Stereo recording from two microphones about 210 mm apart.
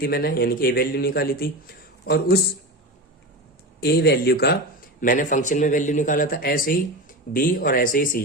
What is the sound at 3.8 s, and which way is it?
A man's voice, 50° left (ahead or behind).